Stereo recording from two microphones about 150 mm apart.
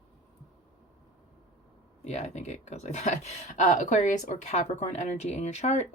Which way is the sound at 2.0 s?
50° left (ahead or behind).